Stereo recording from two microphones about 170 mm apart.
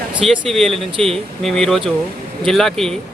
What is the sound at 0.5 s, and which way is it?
Speech, centre (ahead or behind).